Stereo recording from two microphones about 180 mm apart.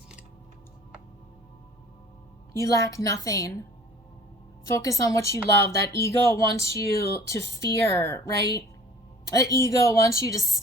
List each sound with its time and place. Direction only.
2.5 s speech: 20° left (ahead or behind)
4.7 s speech: 15° left (ahead or behind)